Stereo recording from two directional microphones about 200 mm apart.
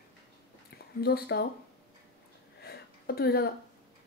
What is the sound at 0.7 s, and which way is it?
Speech, 50° left (ahead or behind).